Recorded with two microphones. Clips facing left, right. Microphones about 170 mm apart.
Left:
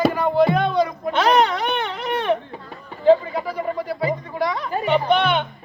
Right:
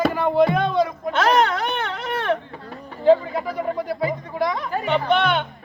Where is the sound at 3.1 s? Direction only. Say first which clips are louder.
Left 1 dB; centre (ahead or behind).